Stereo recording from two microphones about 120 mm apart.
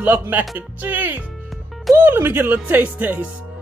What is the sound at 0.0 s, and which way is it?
Speech, 15° right (ahead or behind).